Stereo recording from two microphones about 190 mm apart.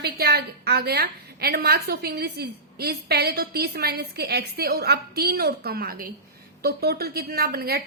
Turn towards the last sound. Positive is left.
turn(degrees=-55)  # may be behind; listen again after turning